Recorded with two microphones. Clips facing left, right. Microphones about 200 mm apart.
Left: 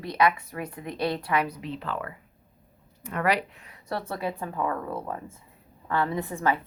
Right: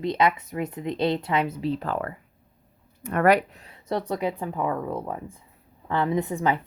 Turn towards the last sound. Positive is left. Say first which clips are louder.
# right 3 dB
turn(degrees=-20)  # may be behind; listen again after turning